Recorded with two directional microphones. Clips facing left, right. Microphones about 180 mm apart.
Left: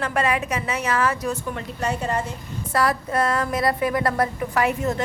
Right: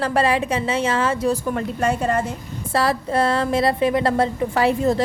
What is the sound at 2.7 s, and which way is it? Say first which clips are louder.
A woman's voice: right 2 dB; 30° right (ahead or behind).